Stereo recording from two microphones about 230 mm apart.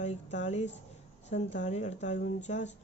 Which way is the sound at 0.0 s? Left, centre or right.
Left.